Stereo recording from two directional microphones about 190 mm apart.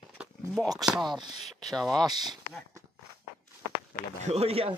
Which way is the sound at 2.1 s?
20° right (ahead or behind).